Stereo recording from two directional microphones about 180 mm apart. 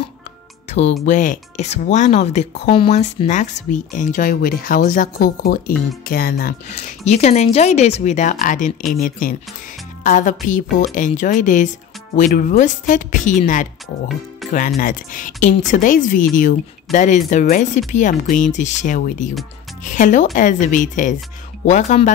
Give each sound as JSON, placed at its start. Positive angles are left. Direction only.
{"t": 0.7, "sound": "music", "side_deg": 35}
{"t": 1.0, "sound": "a woman's voice", "side_deg": 45}
{"t": 10.0, "sound": "speech", "side_deg": 45}
{"t": 14.4, "sound": "music", "side_deg": 0}
{"t": 14.8, "sound": "speech", "side_deg": 50}